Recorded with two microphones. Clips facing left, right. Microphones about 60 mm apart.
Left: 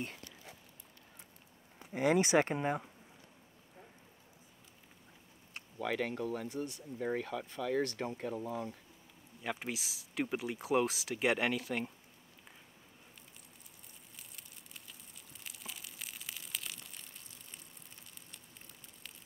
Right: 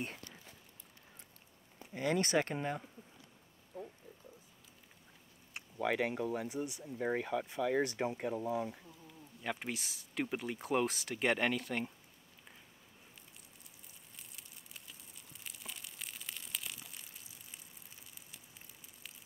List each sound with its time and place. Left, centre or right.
1.9 s speech: left
5.5 s speech: centre
9.4 s speech: centre
14.1 s a sound: centre